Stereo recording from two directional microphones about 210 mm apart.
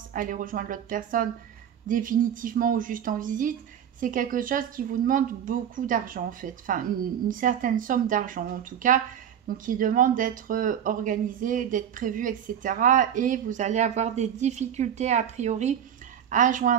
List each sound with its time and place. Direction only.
0.1 s speech: 40° right (ahead or behind)